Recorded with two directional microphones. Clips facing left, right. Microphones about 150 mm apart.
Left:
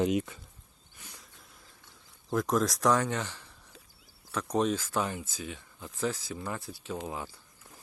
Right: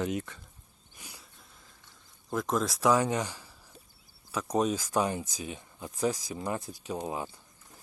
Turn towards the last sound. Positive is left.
turn(degrees=-20)  # may be behind; listen again after turning